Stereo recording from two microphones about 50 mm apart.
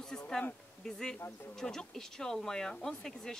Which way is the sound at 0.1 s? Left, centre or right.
Left.